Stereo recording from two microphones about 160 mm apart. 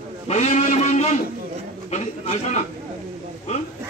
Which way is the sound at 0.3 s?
45° left (ahead or behind).